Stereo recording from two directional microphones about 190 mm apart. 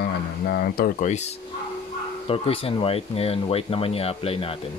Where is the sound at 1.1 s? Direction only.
35° left (ahead or behind).